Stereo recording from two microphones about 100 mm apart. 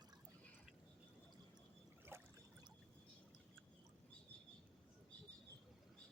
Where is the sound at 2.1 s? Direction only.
25° right (ahead or behind).